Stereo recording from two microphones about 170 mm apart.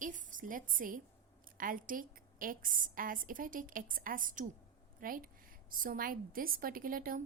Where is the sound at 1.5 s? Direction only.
55° right (ahead or behind).